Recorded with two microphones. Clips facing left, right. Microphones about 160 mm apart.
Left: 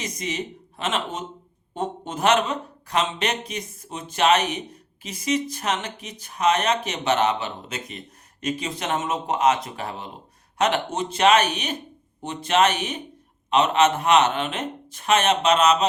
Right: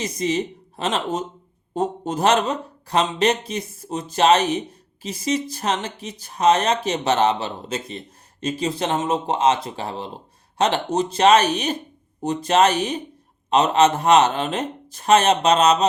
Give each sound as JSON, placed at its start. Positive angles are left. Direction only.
{"t": 0.0, "sound": "speech", "side_deg": -30}